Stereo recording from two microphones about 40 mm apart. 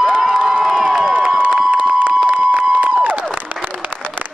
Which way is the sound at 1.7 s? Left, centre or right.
Right.